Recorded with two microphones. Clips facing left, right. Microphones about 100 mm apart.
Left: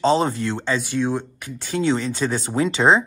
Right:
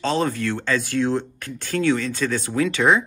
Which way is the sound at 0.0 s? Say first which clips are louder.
Left 3 dB; 20° left (ahead or behind).